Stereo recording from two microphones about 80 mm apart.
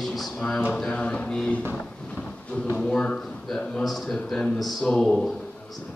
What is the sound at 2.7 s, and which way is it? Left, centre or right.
A man's voice, centre.